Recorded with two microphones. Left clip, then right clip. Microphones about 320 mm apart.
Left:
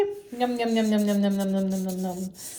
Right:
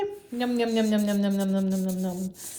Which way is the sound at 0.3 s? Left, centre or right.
Right.